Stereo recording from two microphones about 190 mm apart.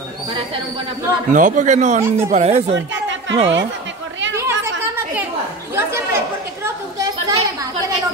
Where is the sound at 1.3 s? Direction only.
45° right (ahead or behind).